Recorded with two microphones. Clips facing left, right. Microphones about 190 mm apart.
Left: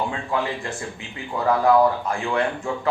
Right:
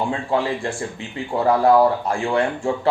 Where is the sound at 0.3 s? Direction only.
30° right (ahead or behind).